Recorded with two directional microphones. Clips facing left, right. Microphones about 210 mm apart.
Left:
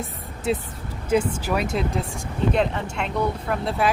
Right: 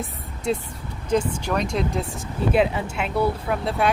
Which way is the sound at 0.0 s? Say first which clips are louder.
Even; centre (ahead or behind).